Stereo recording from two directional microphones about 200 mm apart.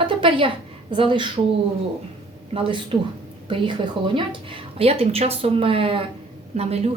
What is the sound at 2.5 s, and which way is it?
A woman's voice, 25° right (ahead or behind).